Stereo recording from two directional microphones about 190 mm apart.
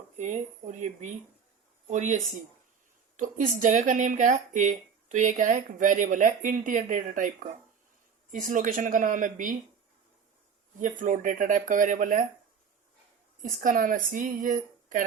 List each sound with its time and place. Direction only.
0.2 s speech: 40° right (ahead or behind)
3.2 s speech: 45° right (ahead or behind)
10.8 s speech: 40° right (ahead or behind)
13.4 s speech: 45° right (ahead or behind)